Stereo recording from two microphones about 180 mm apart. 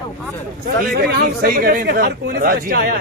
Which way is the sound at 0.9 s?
60° right (ahead or behind).